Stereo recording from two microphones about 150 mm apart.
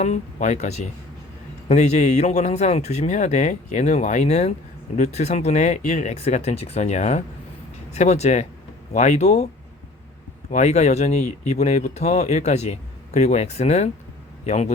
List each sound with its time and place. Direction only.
0.0 s speech: 50° left (ahead or behind)
10.5 s a man's voice: 50° left (ahead or behind)